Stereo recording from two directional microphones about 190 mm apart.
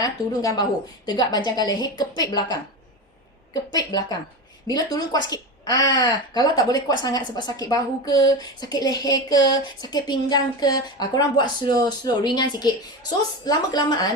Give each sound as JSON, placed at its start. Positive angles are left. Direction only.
{"t": 0.0, "sound": "a woman's voice", "side_deg": 20}